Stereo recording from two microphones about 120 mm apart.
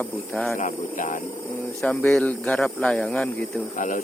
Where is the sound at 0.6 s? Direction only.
90° left.